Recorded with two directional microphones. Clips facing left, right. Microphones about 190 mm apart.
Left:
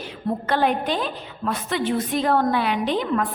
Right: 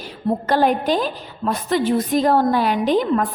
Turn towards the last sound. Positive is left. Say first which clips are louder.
# right 5 dB
turn(degrees=-45)  # may be behind; listen again after turning